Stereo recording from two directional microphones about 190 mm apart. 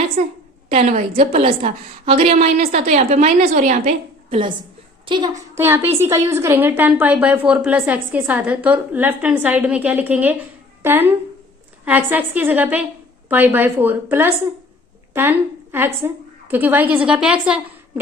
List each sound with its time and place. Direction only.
0.7 s a woman's voice: 40° right (ahead or behind); by 5.3 s 25° right (ahead or behind)
5.5 s a woman's voice: 10° right (ahead or behind)